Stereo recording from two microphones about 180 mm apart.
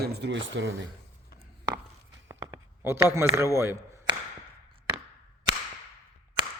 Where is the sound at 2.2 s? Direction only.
15° right (ahead or behind).